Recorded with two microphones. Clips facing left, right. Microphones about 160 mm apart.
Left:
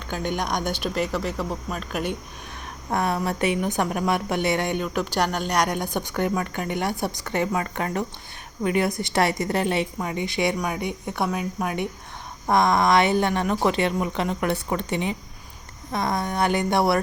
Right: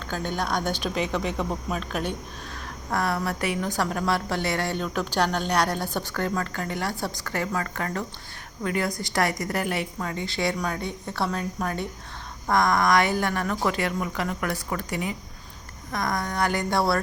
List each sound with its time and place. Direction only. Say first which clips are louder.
0.3 s a woman's voice: left 1 dB; 15° left (ahead or behind)
2.9 s a woman's voice: left 2 dB; 20° left (ahead or behind)